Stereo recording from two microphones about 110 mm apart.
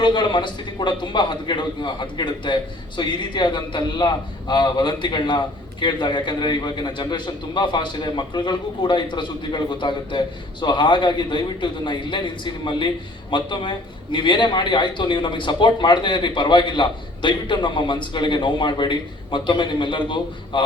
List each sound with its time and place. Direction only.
0.0 s a man's voice: 45° left (ahead or behind)